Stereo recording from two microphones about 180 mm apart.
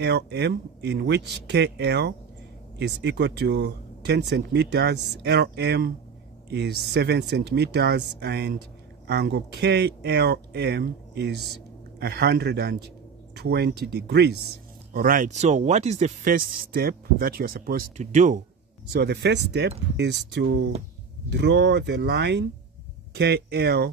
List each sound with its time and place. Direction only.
0.0 s a man's voice: 70° right (ahead or behind)
14.9 s speech: 50° right (ahead or behind)
17.9 s speech: 40° right (ahead or behind)
18.9 s speech: 70° right (ahead or behind)